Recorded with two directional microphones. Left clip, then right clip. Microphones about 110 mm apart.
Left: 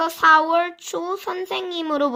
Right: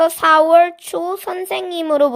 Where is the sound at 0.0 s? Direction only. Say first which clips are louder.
Right 3 dB; 50° right (ahead or behind).